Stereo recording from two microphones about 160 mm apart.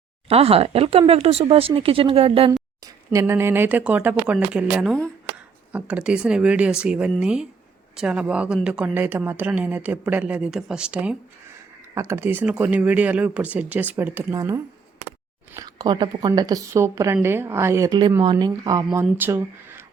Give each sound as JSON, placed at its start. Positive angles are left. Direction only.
{"t": 0.3, "sound": "speech", "side_deg": -40}
{"t": 2.8, "sound": "a woman's voice", "side_deg": -20}
{"t": 19.1, "sound": "speech", "side_deg": -15}